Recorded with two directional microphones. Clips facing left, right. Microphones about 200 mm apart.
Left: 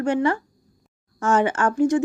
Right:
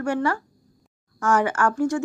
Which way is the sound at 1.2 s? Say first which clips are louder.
Left 1 dB; 25° left (ahead or behind).